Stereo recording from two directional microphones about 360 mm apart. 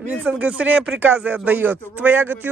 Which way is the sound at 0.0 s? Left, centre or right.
Centre.